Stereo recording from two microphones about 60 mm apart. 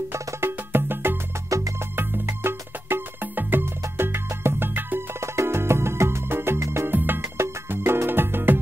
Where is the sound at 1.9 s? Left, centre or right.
Right.